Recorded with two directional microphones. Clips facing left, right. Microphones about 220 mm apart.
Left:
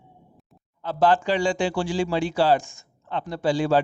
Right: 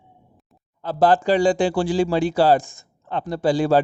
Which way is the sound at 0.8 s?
35° right (ahead or behind).